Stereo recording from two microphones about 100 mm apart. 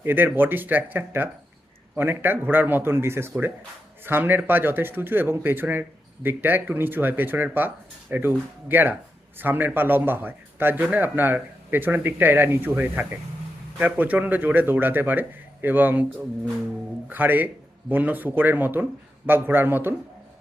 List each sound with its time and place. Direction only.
0.0 s speech: 20° right (ahead or behind)
17.1 s speech: 20° right (ahead or behind)